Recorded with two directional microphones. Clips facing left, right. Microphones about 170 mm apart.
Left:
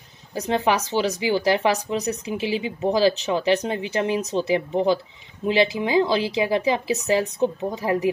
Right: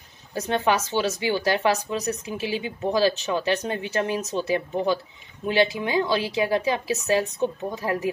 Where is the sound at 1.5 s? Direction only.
20° left (ahead or behind).